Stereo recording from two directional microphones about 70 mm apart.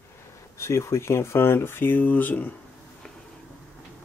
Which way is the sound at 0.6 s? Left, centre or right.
Left.